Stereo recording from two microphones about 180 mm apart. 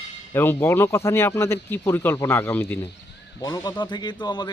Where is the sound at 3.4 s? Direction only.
20° left (ahead or behind).